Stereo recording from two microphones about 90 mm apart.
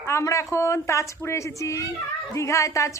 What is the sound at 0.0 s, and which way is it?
Speech, 35° left (ahead or behind).